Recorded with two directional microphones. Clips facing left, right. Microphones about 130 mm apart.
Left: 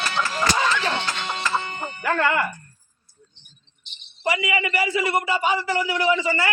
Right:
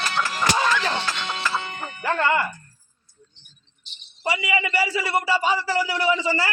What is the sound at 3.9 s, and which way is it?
A man's voice, 30° right (ahead or behind).